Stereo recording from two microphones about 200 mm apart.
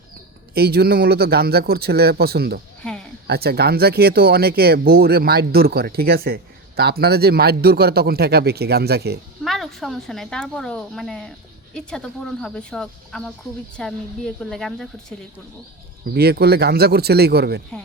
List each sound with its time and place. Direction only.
0.5 s speech: 50° right (ahead or behind)
2.8 s a sound: 5° left (ahead or behind)
3.2 s speech: 50° right (ahead or behind)
9.4 s speech: centre (ahead or behind)
16.1 s speech: 50° right (ahead or behind)